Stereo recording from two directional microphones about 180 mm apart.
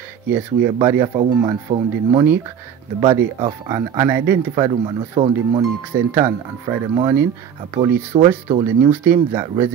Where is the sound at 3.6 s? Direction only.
20° right (ahead or behind).